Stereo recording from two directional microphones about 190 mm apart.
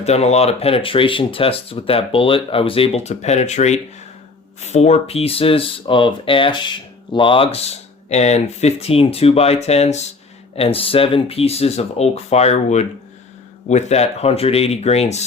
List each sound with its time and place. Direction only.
0.0 s speech: 35° left (ahead or behind)